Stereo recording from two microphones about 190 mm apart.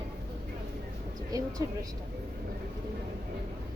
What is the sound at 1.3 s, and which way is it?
Speech, 20° right (ahead or behind).